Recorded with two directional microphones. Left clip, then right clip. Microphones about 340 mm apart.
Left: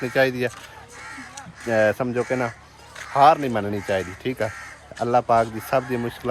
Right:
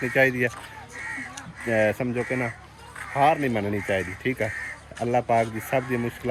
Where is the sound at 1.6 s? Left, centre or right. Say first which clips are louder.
Left 3 dB; centre.